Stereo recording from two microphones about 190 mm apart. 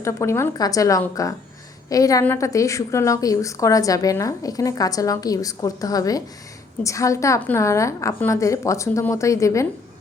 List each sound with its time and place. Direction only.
0.0 s a woman's voice: 15° left (ahead or behind)